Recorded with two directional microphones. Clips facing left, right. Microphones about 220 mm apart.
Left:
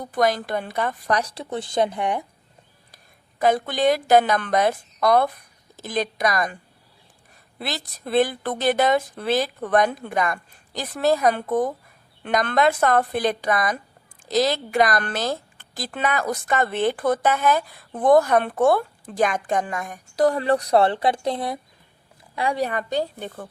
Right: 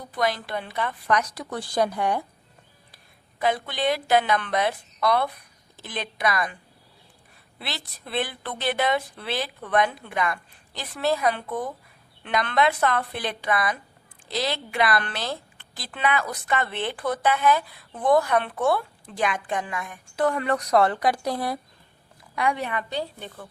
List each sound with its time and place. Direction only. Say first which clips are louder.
0.0 s a woman's voice: left 5 dB; 45° left (ahead or behind); by 2.2 s 20° left (ahead or behind)
2.9 s a woman's voice: left 1 dB; 45° left (ahead or behind)
7.6 s a woman's voice: left 6 dB; 45° left (ahead or behind); by 21.6 s 25° left (ahead or behind)
22.4 s a woman's voice: left 2 dB; 35° left (ahead or behind)